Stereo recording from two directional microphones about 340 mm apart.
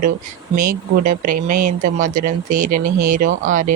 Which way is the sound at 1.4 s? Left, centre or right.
Right.